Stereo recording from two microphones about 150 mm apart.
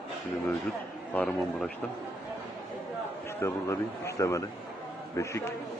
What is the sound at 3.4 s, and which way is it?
A man's voice, 20° left (ahead or behind).